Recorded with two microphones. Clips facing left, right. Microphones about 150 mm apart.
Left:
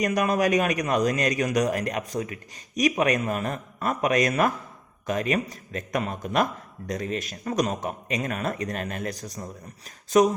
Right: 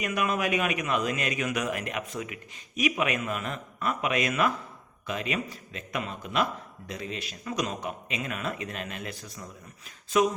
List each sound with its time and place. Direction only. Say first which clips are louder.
0.0 s a man's voice: left 5 dB; 40° left (ahead or behind)